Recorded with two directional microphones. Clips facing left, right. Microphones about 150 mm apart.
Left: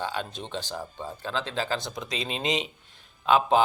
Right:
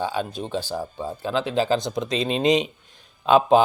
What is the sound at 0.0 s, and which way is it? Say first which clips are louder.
Speech: right 6 dB; 10° right (ahead or behind).